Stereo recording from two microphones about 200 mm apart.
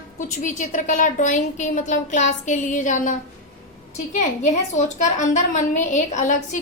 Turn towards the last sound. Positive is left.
turn(degrees=35)  # may be behind; listen again after turning